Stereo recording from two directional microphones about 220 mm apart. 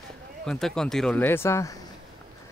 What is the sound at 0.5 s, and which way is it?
Speech, centre (ahead or behind).